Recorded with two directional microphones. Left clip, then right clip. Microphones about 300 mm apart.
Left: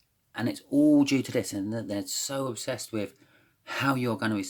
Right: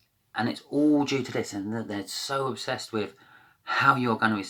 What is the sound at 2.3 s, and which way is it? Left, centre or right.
Speech, left.